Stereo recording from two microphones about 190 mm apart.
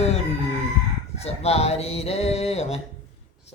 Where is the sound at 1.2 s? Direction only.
35° left (ahead or behind).